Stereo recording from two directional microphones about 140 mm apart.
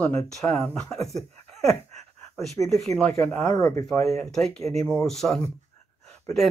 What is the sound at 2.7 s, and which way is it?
Speech, 5° left (ahead or behind).